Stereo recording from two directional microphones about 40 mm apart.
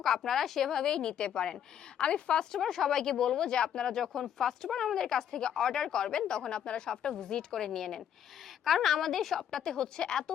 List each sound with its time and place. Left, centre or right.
0.0 s speech: centre; by 2.4 s left
2.4 s speech: centre